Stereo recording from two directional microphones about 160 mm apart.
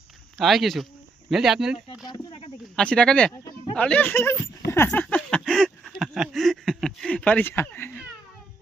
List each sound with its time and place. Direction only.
0.3 s speech: centre (ahead or behind)
2.0 s speech: 25° left (ahead or behind)
2.7 s speech: 5° left (ahead or behind)
4.7 s a sound: 10° left (ahead or behind)